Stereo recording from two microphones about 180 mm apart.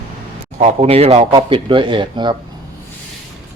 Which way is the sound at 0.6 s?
35° right (ahead or behind).